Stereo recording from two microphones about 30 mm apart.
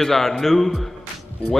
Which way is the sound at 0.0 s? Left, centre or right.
Centre.